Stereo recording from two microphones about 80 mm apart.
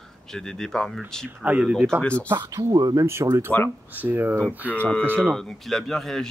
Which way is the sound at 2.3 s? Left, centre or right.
Right.